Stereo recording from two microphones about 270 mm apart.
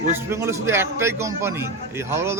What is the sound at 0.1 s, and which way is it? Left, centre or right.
A man's voice, centre.